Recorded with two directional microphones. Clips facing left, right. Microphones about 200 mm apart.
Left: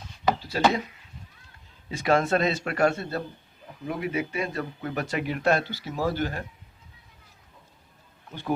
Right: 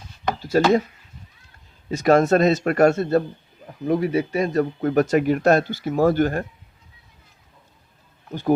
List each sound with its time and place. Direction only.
0.5 s speech: 50° right (ahead or behind)
1.9 s speech: 45° right (ahead or behind)
8.3 s speech: 40° right (ahead or behind)